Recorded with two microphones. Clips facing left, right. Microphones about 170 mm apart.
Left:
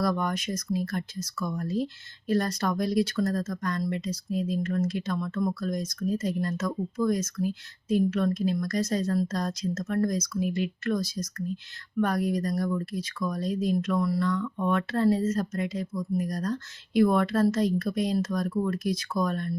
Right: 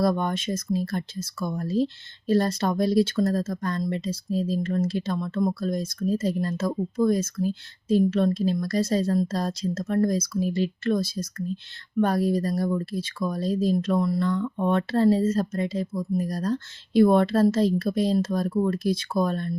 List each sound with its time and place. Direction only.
0.0 s speech: 25° right (ahead or behind)